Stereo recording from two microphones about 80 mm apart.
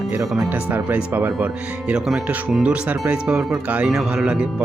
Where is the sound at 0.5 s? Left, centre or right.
Centre.